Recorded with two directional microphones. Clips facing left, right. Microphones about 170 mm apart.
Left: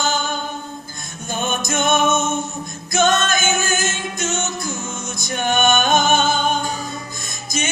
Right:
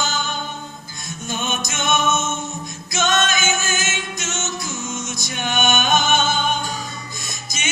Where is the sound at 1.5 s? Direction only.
50° left (ahead or behind).